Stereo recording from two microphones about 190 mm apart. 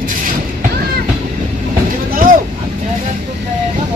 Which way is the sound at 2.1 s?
45° right (ahead or behind).